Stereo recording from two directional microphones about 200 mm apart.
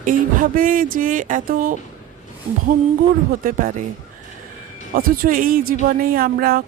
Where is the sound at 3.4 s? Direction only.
45° right (ahead or behind).